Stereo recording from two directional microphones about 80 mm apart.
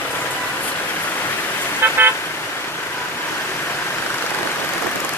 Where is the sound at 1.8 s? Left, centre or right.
Right.